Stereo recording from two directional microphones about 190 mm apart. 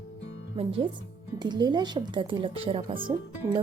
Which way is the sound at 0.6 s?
30° right (ahead or behind).